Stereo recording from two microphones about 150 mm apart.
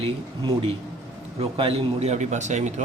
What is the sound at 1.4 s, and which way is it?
Speech, 40° right (ahead or behind).